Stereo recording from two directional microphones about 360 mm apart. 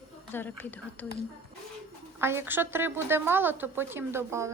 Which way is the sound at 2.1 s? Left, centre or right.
Centre.